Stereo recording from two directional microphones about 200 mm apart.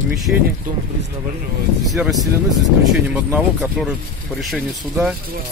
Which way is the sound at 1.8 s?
Centre (ahead or behind).